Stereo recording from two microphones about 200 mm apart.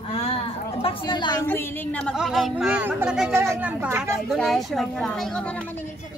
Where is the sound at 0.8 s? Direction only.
20° left (ahead or behind).